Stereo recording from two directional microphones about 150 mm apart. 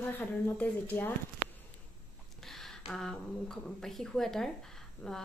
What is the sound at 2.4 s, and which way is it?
A woman's voice, centre (ahead or behind).